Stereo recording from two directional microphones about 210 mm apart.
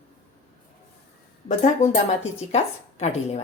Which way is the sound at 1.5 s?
35° left (ahead or behind).